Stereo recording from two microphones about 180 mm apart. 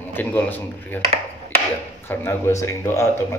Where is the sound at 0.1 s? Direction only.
10° left (ahead or behind).